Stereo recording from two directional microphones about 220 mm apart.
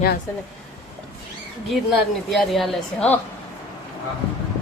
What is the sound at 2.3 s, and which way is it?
Speech, centre (ahead or behind).